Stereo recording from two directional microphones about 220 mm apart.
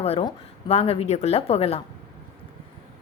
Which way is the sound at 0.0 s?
25° left (ahead or behind).